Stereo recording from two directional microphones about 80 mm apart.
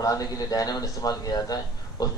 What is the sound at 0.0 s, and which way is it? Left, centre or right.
Speech, left.